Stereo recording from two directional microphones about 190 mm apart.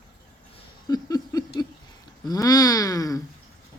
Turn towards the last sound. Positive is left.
turn(degrees=20)  # may be behind; listen again after turning